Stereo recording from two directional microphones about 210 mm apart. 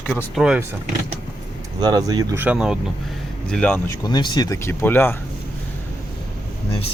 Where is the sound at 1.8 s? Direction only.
20° right (ahead or behind).